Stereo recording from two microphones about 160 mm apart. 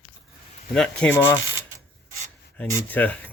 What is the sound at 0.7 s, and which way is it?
Speech, 5° left (ahead or behind).